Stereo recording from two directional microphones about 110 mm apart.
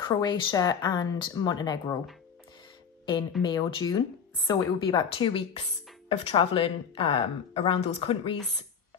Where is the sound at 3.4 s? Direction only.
40° left (ahead or behind).